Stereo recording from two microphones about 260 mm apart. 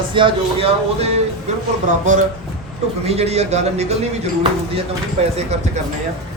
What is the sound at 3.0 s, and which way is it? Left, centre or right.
Speech, right.